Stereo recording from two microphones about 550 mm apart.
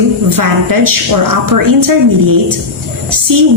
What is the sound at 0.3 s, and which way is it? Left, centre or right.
A woman's voice, right.